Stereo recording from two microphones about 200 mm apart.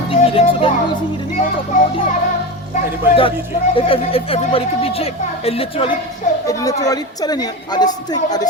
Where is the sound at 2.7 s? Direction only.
25° left (ahead or behind).